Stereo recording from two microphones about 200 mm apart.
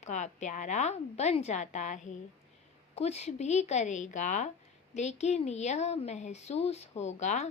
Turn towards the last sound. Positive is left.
turn(degrees=35)  # may be behind; listen again after turning